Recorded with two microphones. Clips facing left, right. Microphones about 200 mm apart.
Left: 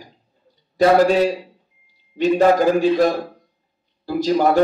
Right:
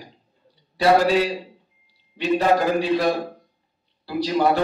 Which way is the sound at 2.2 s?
45° left (ahead or behind).